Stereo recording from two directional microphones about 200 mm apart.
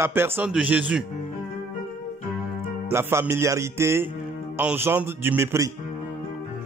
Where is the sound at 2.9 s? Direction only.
15° right (ahead or behind).